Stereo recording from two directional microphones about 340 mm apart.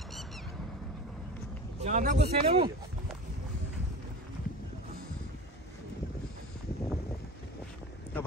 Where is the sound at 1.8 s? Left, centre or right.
Right.